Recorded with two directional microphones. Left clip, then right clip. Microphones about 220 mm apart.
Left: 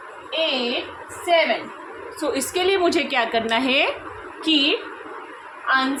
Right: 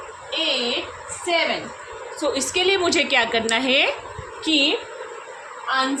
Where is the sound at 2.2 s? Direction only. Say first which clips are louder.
Right 1 dB; 15° left (ahead or behind).